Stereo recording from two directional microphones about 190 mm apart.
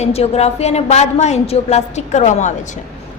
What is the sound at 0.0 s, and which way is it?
A woman's voice, 35° left (ahead or behind).